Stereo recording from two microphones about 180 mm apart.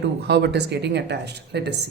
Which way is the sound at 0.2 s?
70° right (ahead or behind).